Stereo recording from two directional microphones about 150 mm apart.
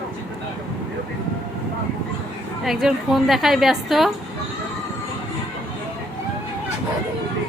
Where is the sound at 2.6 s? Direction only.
Centre (ahead or behind).